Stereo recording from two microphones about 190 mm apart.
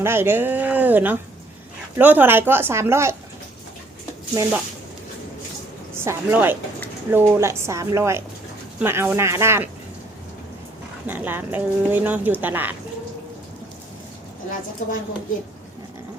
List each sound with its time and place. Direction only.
0.0 s speech: 10° right (ahead or behind)
5.9 s speech: 10° right (ahead or behind)
11.0 s speech: 10° right (ahead or behind)
14.8 s a woman's voice: 40° left (ahead or behind)